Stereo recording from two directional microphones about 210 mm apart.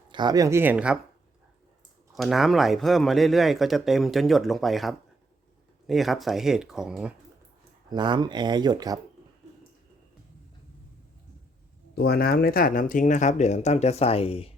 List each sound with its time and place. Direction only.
0.1 s speech: 20° right (ahead or behind)
2.1 s speech: centre (ahead or behind)
7.9 s speech: 20° right (ahead or behind)
11.9 s speech: 45° left (ahead or behind); by 14.5 s 25° left (ahead or behind)